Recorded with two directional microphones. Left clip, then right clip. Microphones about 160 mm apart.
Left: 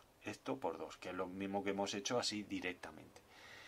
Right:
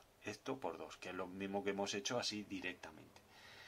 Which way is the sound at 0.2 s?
15° left (ahead or behind).